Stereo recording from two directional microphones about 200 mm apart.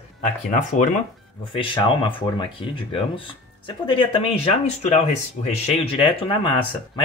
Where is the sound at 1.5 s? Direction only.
25° left (ahead or behind).